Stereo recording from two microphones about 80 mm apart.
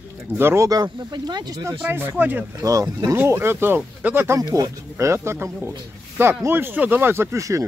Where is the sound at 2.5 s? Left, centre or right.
Right.